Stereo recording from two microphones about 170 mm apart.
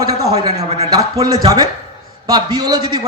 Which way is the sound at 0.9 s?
20° right (ahead or behind).